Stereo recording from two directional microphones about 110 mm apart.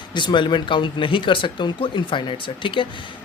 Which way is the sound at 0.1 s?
45° left (ahead or behind).